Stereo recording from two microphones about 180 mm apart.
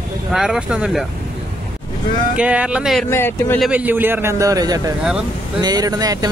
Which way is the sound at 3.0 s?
15° left (ahead or behind).